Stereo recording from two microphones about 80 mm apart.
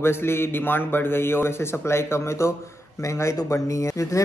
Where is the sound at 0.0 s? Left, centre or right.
Left.